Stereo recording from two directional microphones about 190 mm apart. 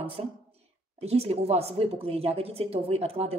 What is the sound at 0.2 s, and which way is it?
A woman's voice, 30° right (ahead or behind).